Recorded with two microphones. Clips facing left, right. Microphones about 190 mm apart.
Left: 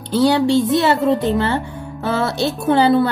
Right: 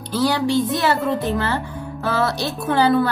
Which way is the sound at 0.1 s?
25° left (ahead or behind).